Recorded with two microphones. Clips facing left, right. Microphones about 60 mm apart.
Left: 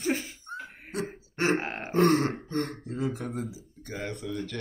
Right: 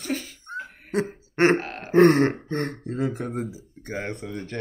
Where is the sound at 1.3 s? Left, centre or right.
Right.